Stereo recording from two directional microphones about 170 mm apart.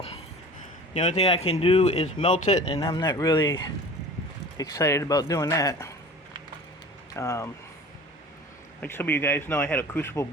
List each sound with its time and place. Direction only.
0.9 s speech: 40° left (ahead or behind)
2.8 s speech: 20° left (ahead or behind)
7.1 s speech: 15° left (ahead or behind)
8.8 s speech: 10° left (ahead or behind)